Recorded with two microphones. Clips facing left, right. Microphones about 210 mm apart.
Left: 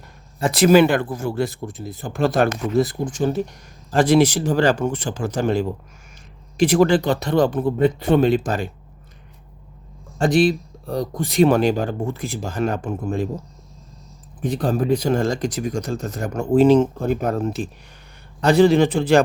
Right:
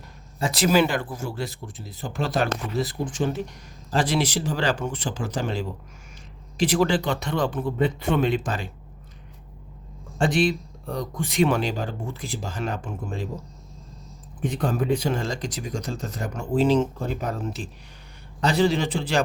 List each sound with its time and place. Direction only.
0.4 s speech: 55° left (ahead or behind); by 8.7 s 40° left (ahead or behind)
10.2 s speech: 40° left (ahead or behind)
14.4 s speech: 35° left (ahead or behind); by 19.2 s 50° left (ahead or behind)